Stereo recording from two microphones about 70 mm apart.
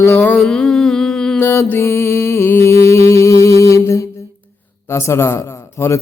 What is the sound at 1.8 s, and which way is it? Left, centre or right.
Music, left.